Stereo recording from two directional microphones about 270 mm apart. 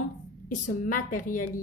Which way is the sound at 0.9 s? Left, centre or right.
Left.